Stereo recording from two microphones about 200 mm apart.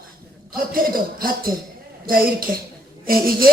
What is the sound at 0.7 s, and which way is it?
Speech, 45° right (ahead or behind).